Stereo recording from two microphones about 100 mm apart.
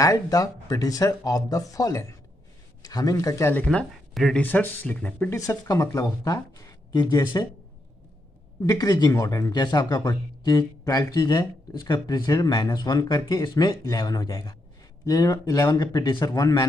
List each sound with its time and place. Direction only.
0.0 s speech: 35° left (ahead or behind)
3.5 s speech: 10° left (ahead or behind)
4.4 s speech: 15° left (ahead or behind)
5.9 s speech: 35° left (ahead or behind)
8.6 s speech: 35° left (ahead or behind)